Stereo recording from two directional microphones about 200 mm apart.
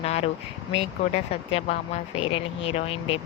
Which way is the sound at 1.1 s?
30° left (ahead or behind).